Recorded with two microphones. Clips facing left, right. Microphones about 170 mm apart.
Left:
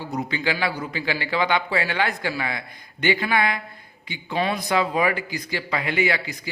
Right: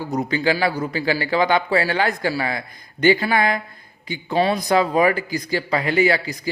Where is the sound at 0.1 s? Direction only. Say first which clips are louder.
Right 5 dB; 40° right (ahead or behind).